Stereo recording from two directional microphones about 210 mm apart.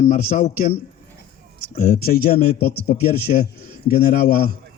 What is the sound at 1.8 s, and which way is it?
A man's voice, 45° left (ahead or behind).